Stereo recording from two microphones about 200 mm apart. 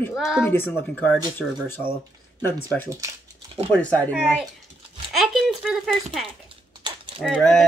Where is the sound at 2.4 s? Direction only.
10° left (ahead or behind).